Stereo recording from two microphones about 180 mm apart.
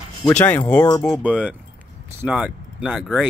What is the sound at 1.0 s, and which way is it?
Speech, 5° right (ahead or behind).